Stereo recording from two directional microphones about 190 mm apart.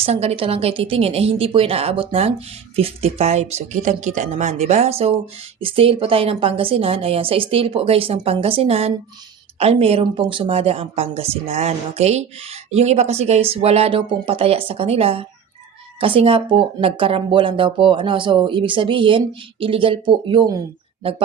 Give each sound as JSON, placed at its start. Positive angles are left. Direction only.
{"t": 0.0, "sound": "speech", "side_deg": -35}